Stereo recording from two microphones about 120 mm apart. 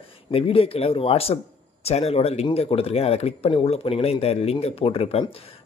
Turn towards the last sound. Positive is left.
turn(degrees=55)  # may be behind; listen again after turning